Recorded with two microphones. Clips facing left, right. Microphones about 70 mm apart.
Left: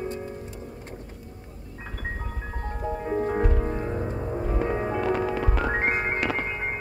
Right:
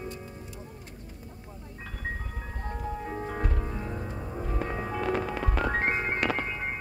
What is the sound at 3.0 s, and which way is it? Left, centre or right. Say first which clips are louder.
Music: left 8 dB; centre.